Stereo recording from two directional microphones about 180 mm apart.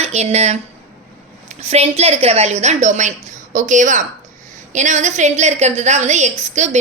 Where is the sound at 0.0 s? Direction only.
35° right (ahead or behind).